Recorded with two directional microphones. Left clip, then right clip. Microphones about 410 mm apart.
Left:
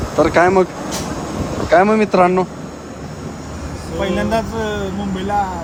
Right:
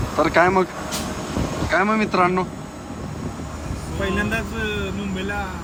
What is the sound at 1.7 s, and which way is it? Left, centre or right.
Speech, centre.